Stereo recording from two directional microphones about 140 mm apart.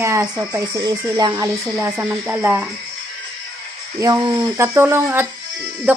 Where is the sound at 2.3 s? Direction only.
15° right (ahead or behind).